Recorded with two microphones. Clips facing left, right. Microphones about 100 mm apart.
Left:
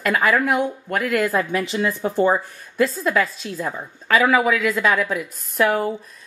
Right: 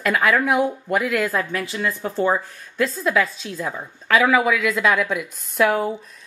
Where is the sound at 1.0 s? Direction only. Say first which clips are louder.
Left 5 dB; centre (ahead or behind).